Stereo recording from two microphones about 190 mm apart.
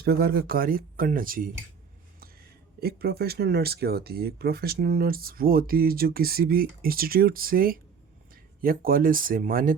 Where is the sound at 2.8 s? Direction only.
55° right (ahead or behind).